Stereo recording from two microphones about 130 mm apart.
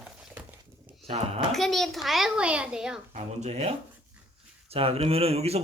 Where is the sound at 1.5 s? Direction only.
Centre (ahead or behind).